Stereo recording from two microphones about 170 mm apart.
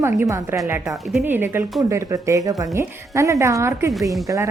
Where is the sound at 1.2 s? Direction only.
15° right (ahead or behind).